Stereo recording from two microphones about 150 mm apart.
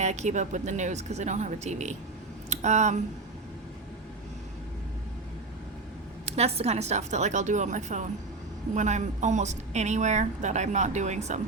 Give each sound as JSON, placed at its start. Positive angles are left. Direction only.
{"t": 0.0, "sound": "a woman's voice", "side_deg": -50}
{"t": 6.2, "sound": "a woman's voice", "side_deg": -45}